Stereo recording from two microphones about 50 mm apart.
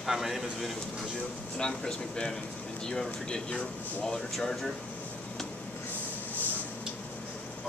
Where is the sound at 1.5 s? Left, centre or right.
Centre.